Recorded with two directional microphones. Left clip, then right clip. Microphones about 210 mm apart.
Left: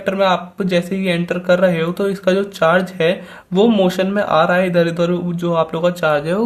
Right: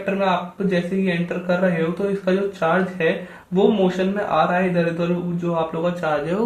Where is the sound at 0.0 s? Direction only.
40° left (ahead or behind).